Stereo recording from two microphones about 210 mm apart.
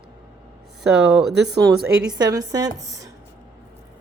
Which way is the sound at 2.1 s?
20° right (ahead or behind).